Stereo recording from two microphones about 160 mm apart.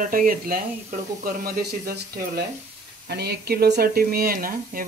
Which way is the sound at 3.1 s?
90° right.